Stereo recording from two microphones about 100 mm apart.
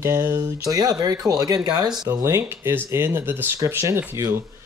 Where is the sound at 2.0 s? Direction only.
30° right (ahead or behind).